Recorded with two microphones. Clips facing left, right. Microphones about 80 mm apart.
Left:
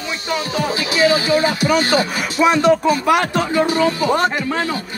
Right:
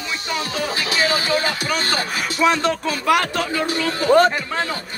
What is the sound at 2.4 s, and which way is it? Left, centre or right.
Speech, centre.